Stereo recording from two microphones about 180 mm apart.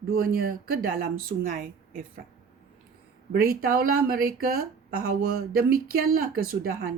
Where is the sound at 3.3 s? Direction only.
55° right (ahead or behind).